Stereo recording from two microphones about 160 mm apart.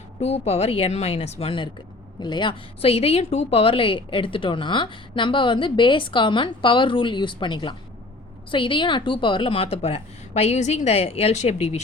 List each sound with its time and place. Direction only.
0.2 s a woman's voice: 40° left (ahead or behind)